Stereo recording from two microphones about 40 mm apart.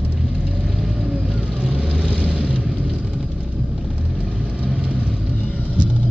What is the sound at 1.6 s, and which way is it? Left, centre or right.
Vehicle, right.